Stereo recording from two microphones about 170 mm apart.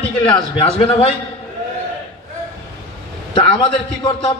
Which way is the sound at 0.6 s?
35° left (ahead or behind).